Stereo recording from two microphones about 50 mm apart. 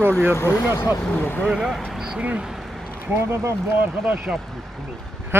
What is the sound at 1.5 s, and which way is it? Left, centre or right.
Speech, centre.